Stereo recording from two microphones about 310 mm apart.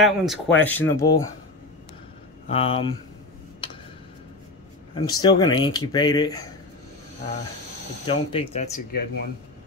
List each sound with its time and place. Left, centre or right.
0.0 s speech: centre
2.4 s speech: centre
4.9 s speech: centre
8.1 s speech: centre